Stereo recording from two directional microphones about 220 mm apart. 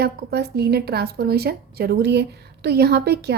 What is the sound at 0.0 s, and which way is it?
A woman's voice, 50° right (ahead or behind).